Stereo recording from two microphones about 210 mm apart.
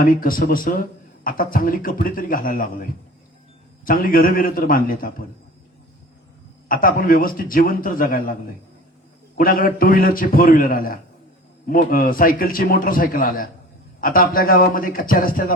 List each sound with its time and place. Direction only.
0.0 s a man's voice: 40° left (ahead or behind)
6.7 s a man's voice: 40° left (ahead or behind)
9.4 s a man's voice: 45° left (ahead or behind)